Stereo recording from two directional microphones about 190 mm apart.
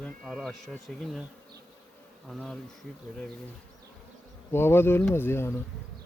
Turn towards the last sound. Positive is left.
turn(degrees=10)  # may be behind; listen again after turning